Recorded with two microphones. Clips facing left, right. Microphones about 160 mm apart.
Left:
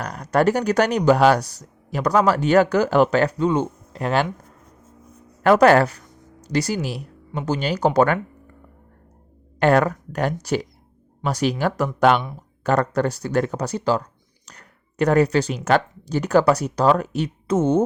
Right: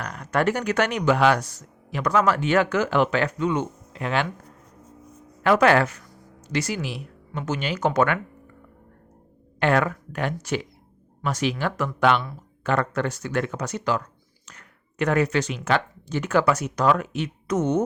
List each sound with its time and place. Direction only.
0.0 s speech: 40° left (ahead or behind)
5.4 s speech: 45° left (ahead or behind)
9.6 s speech: 40° left (ahead or behind)